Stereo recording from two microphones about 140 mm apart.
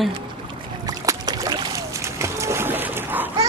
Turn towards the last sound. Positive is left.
turn(degrees=-15)  # may be behind; listen again after turning